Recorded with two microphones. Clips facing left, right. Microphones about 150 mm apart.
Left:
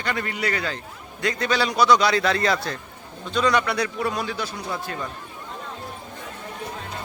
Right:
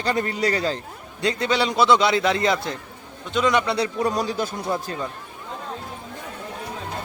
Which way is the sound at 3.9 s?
40° right (ahead or behind).